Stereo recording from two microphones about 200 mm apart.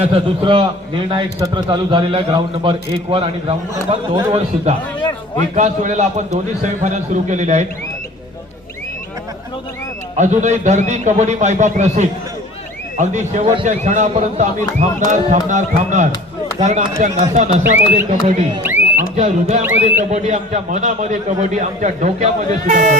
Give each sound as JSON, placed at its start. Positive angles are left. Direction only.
{"t": 0.0, "sound": "a man's voice", "side_deg": -30}
{"t": 10.2, "sound": "a man's voice", "side_deg": -35}
{"t": 17.6, "sound": "speech", "side_deg": -10}
{"t": 17.9, "sound": "a man's voice", "side_deg": -40}
{"t": 18.6, "sound": "a sound", "side_deg": -10}
{"t": 19.1, "sound": "a man's voice", "side_deg": -35}
{"t": 19.6, "sound": "speech", "side_deg": -10}
{"t": 20.1, "sound": "a man's voice", "side_deg": -35}